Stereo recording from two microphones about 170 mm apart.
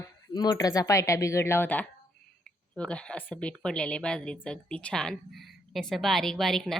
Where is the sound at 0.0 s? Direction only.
20° left (ahead or behind).